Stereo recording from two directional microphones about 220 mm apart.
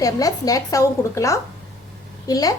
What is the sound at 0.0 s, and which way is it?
A woman's voice, 15° left (ahead or behind).